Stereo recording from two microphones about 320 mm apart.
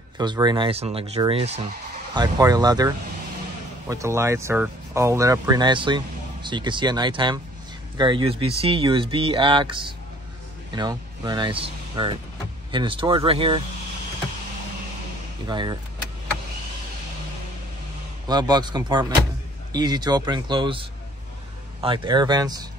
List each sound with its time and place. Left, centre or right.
0.2 s speech: centre
3.9 s speech: centre
15.4 s speech: centre
18.3 s speech: centre
21.8 s speech: centre